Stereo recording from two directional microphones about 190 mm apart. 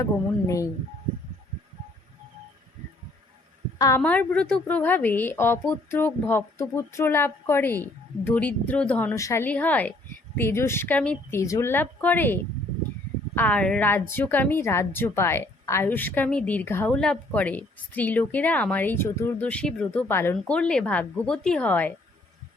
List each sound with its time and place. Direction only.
0.0 s a woman's voice: 15° left (ahead or behind)
3.8 s a woman's voice: 15° left (ahead or behind)